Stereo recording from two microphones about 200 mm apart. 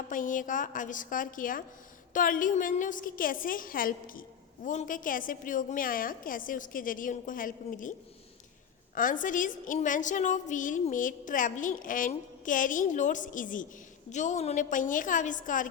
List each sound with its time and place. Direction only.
0.1 s a woman's voice: 40° left (ahead or behind)
9.0 s a woman's voice: 40° left (ahead or behind)